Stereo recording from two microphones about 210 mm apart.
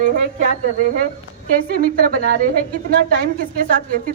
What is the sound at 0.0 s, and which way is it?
A woman's voice, 40° right (ahead or behind).